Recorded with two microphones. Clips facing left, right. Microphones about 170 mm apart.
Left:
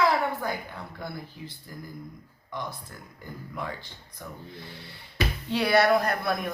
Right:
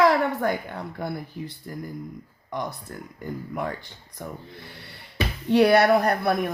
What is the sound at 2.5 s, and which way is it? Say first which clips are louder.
Speech: right 5 dB; 65° right (ahead or behind).